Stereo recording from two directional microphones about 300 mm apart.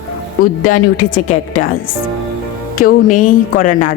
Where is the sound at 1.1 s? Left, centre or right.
Left.